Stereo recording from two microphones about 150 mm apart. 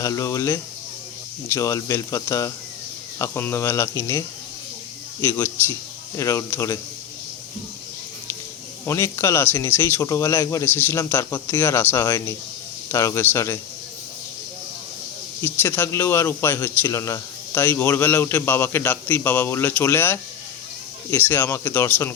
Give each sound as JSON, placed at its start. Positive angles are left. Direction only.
{"t": 0.0, "sound": "speech", "side_deg": 20}
{"t": 5.2, "sound": "speech", "side_deg": 15}
{"t": 8.9, "sound": "speech", "side_deg": 20}
{"t": 15.4, "sound": "speech", "side_deg": 15}